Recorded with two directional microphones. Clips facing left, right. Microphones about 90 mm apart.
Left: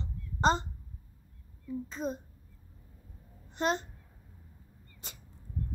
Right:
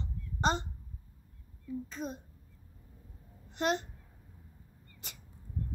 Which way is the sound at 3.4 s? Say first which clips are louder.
Left 1 dB; 35° left (ahead or behind).